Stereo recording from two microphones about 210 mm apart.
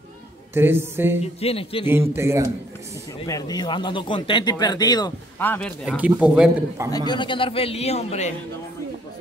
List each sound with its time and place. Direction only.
0.6 s a woman's voice: 10° right (ahead or behind)
1.2 s speech: 30° left (ahead or behind)
1.9 s a woman's voice: 10° right (ahead or behind)
3.2 s speech: 15° left (ahead or behind)
5.9 s a man's voice: 5° right (ahead or behind)
7.1 s speech: 25° left (ahead or behind)